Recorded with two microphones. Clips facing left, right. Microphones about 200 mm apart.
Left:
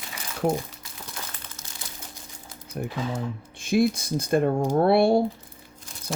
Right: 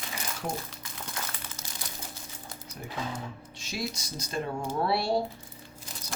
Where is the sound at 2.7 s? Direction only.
55° left (ahead or behind).